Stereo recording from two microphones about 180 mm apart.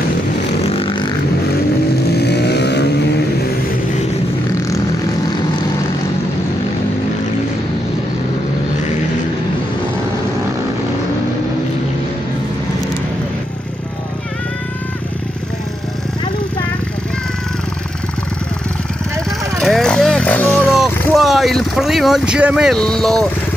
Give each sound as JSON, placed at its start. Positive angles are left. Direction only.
{"t": 0.7, "sound": "vehicle", "side_deg": 30}
{"t": 2.1, "sound": "vehicle", "side_deg": 65}
{"t": 19.6, "sound": "vehicle", "side_deg": 0}
{"t": 20.7, "sound": "vehicle", "side_deg": 0}